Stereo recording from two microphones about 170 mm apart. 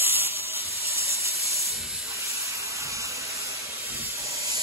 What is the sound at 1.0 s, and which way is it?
Steam, 15° right (ahead or behind).